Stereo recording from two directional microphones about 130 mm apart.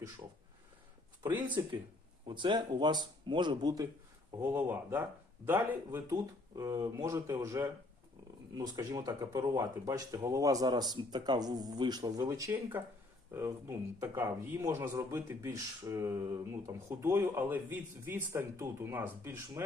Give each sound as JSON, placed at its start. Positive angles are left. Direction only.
{"t": 2.2, "sound": "speech", "side_deg": -40}
{"t": 4.4, "sound": "speech", "side_deg": -20}